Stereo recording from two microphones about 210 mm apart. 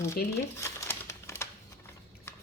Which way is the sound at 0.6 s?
15° left (ahead or behind).